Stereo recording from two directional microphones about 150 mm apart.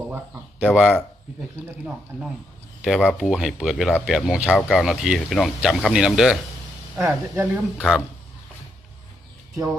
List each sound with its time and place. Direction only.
0.7 s speech: 5° right (ahead or behind)
2.8 s speech: centre (ahead or behind)
7.0 s speech: 15° right (ahead or behind)
7.8 s speech: centre (ahead or behind)